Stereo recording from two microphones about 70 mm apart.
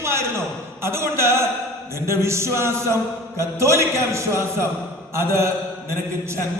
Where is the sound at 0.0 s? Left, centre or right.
Right.